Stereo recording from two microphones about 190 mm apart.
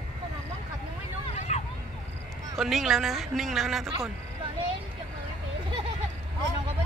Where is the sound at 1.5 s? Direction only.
35° left (ahead or behind).